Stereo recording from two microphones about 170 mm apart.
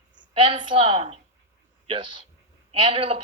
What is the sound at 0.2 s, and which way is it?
A woman's voice, 30° right (ahead or behind).